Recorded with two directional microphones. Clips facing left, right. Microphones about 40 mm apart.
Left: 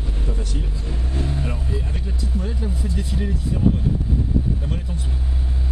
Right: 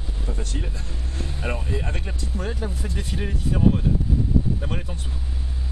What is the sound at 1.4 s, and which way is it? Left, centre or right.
Vehicle, right.